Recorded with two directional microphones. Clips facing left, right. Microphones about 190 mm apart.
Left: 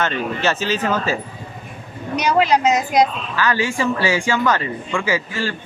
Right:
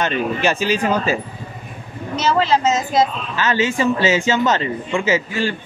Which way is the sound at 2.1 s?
15° left (ahead or behind).